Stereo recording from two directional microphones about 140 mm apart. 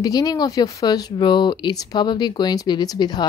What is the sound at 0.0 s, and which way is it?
Speech, 25° left (ahead or behind).